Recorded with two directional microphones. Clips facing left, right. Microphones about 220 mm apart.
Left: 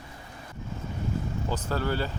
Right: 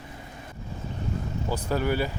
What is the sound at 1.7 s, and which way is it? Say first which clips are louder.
Speech: right 4 dB; 15° right (ahead or behind).